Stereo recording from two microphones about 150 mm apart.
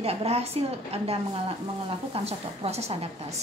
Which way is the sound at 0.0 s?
40° right (ahead or behind).